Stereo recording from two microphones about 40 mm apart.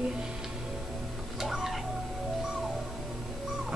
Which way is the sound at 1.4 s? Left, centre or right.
Centre.